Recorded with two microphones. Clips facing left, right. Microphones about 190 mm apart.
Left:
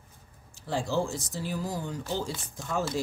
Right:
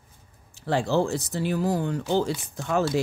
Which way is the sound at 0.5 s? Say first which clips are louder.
Right 6 dB; 70° right (ahead or behind).